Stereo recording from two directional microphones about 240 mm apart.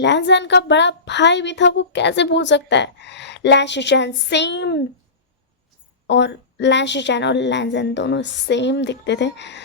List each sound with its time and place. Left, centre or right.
0.0 s a woman's voice: left
6.1 s a woman's voice: left